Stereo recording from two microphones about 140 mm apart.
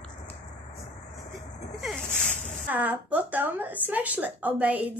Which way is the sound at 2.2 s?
60° left (ahead or behind).